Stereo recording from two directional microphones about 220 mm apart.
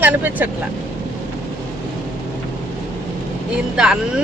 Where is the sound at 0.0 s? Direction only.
10° right (ahead or behind).